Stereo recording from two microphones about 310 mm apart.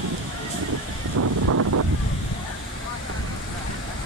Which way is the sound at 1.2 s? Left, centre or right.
Right.